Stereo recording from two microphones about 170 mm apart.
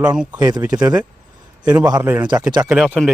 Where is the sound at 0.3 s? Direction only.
20° right (ahead or behind).